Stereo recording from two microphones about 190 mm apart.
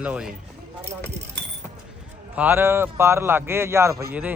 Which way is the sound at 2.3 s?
10° right (ahead or behind).